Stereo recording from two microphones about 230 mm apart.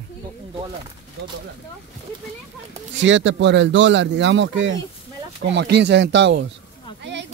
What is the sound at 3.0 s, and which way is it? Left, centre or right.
Speech, right.